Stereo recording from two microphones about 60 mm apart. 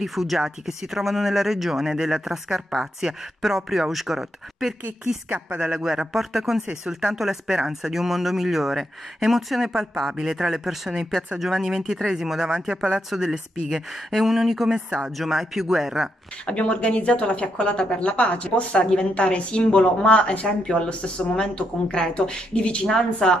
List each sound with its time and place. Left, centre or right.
0.0 s speech: centre
5.3 s speech: right
5.7 s speech: centre
16.4 s speech: centre